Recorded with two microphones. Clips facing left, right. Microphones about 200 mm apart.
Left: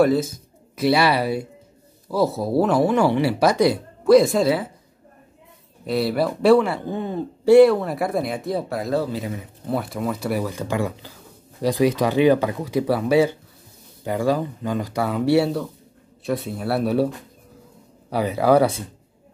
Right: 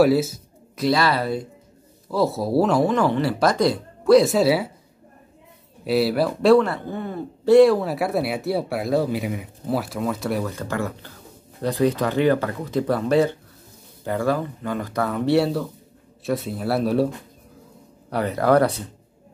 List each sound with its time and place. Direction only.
0.0 s a sound: 5° right (ahead or behind)
0.9 s speech: 15° left (ahead or behind); by 4.6 s 5° right (ahead or behind)
5.9 s speech: 5° right (ahead or behind)
6.9 s speech: 20° left (ahead or behind)
7.5 s speech: centre (ahead or behind)
10.5 s speech: 15° left (ahead or behind)
18.1 s speech: 5° left (ahead or behind)